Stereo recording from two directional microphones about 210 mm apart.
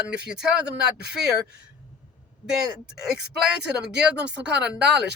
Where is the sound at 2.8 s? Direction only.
5° right (ahead or behind).